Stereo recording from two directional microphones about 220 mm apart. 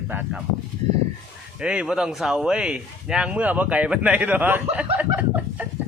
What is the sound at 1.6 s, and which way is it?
Speech, 5° right (ahead or behind).